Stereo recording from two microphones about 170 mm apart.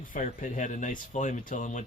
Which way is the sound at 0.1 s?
50° left (ahead or behind).